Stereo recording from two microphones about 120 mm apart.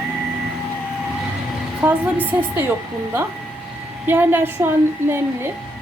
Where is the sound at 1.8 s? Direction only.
15° right (ahead or behind).